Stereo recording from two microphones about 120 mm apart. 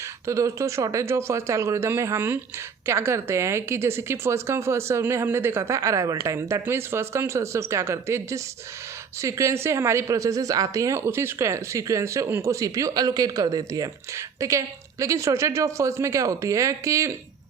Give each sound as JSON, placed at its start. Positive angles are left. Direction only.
{"t": 0.3, "sound": "a woman's voice", "side_deg": -25}